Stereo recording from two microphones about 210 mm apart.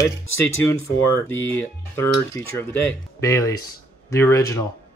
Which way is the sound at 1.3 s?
10° left (ahead or behind).